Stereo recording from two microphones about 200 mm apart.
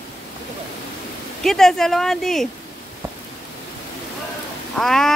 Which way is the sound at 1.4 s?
Centre (ahead or behind).